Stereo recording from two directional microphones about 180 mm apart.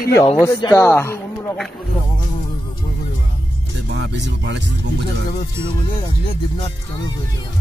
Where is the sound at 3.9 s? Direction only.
70° right (ahead or behind).